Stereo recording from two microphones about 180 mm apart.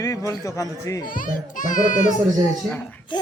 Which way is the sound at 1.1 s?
50° left (ahead or behind).